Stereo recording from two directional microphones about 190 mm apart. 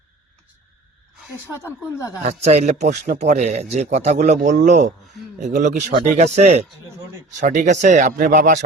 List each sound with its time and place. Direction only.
1.6 s speech: 15° left (ahead or behind)
2.2 s speech: 35° right (ahead or behind)